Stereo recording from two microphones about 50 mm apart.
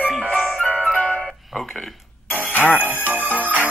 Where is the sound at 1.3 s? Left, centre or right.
Centre.